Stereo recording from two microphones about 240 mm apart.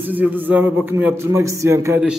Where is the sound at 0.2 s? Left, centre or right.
Centre.